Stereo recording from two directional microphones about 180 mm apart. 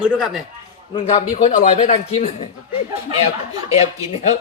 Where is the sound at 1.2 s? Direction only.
45° left (ahead or behind).